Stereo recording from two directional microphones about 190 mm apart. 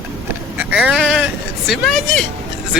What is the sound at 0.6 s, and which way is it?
Speech, 5° right (ahead or behind).